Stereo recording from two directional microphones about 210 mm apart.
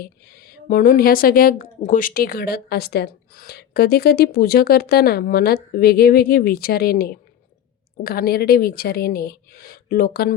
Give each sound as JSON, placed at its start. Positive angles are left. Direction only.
{"t": 0.0, "sound": "a woman's voice", "side_deg": 45}